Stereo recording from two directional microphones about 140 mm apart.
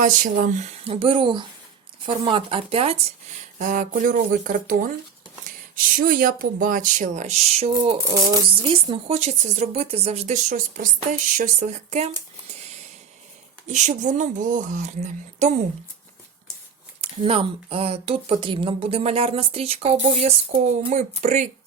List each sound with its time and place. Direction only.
0.0 s speech: 70° right (ahead or behind)
0.9 s speech: 40° right (ahead or behind)
3.6 s speech: 65° right (ahead or behind)
8.1 s speech: 25° right (ahead or behind)
8.6 s speech: 40° right (ahead or behind)
11.3 s speech: 60° right (ahead or behind)
13.7 s speech: 60° right (ahead or behind)
17.0 s speech: 45° right (ahead or behind)